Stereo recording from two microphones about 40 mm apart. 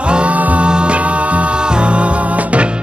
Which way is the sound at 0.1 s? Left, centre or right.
Right.